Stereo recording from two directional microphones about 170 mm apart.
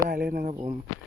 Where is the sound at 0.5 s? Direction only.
25° right (ahead or behind).